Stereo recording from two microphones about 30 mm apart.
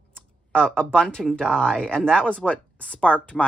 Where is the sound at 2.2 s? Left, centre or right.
Left.